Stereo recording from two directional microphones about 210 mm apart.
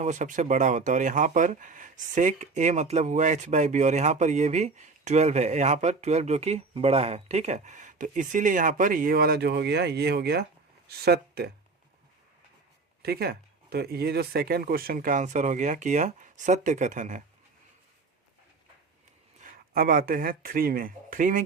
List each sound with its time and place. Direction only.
0.0 s speech: 35° right (ahead or behind)
13.0 s speech: 50° right (ahead or behind)
19.4 s speech: 45° right (ahead or behind)